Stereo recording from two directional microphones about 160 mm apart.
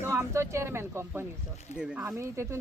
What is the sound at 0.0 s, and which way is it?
Speech, 15° right (ahead or behind).